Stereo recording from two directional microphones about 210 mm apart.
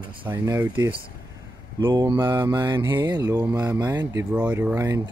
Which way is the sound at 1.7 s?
20° right (ahead or behind).